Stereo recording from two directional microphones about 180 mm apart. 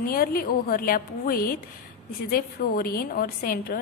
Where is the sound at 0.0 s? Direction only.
55° left (ahead or behind).